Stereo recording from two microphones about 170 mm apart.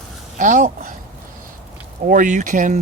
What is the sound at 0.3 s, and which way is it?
Speech, 50° right (ahead or behind).